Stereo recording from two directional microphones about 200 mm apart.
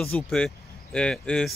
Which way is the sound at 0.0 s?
5° left (ahead or behind).